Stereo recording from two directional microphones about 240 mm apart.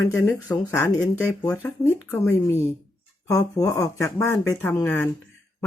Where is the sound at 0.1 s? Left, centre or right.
Centre.